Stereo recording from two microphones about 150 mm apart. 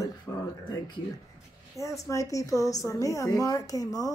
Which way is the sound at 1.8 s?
20° left (ahead or behind).